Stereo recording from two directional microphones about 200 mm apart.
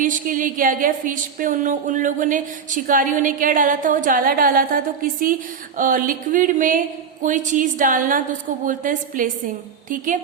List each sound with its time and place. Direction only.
0.0 s a woman's voice: 40° right (ahead or behind)